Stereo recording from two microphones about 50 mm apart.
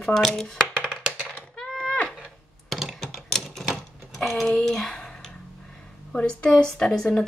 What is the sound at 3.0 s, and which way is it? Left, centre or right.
Typewriter, centre.